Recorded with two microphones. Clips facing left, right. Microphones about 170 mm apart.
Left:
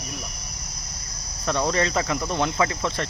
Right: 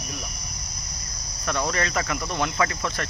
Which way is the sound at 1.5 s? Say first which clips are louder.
Left 3 dB; 30° left (ahead or behind).